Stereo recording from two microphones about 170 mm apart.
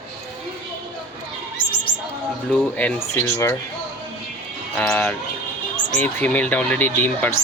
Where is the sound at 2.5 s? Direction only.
5° left (ahead or behind).